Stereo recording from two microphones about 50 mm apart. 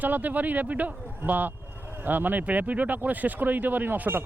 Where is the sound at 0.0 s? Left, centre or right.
Right.